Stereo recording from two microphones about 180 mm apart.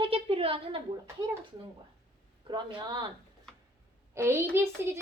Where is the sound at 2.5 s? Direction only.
25° right (ahead or behind).